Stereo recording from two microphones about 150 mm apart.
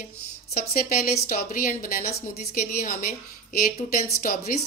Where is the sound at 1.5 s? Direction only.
65° left (ahead or behind).